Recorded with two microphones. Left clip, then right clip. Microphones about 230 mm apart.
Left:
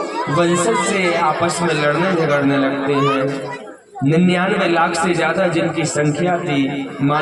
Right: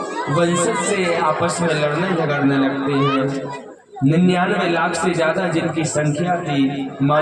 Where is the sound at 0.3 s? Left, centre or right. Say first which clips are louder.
Left 2 dB; left.